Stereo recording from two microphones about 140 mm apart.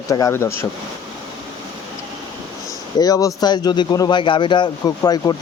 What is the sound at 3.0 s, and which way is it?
A man's voice, 25° left (ahead or behind).